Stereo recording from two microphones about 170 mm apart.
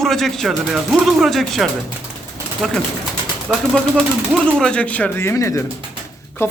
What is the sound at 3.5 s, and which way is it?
A man's voice, centre (ahead or behind).